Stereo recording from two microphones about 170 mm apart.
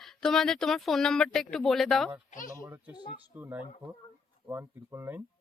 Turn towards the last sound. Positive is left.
turn(degrees=-15)  # may be behind; listen again after turning